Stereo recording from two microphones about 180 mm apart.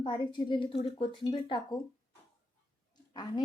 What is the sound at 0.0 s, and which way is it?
A woman's voice, 25° left (ahead or behind).